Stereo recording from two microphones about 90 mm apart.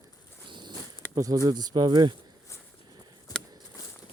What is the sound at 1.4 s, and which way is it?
Speech, 50° right (ahead or behind).